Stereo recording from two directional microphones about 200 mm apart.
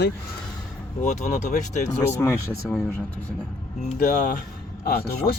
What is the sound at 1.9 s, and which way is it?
Speech, 15° left (ahead or behind).